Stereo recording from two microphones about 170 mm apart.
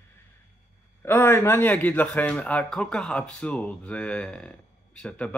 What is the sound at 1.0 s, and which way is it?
Speech, 15° left (ahead or behind).